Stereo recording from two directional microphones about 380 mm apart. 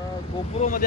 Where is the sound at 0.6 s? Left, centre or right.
Left.